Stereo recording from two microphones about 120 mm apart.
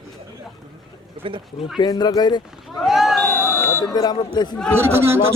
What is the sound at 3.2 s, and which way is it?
Buzzer, 20° left (ahead or behind).